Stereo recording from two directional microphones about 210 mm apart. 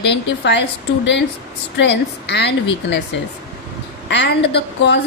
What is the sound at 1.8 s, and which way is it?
Speech, 55° left (ahead or behind).